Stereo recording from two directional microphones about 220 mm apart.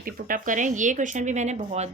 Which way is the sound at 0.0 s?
40° right (ahead or behind).